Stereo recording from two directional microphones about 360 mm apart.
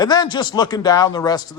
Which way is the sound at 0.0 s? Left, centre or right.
Centre.